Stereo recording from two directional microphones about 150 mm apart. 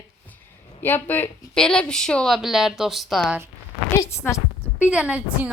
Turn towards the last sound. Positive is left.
turn(degrees=-10)  # may be behind; listen again after turning